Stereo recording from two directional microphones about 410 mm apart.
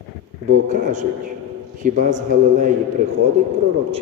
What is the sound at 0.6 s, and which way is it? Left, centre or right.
A man's voice, centre.